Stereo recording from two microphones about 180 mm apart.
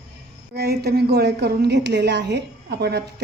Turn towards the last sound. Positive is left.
turn(degrees=-65)  # may be behind; listen again after turning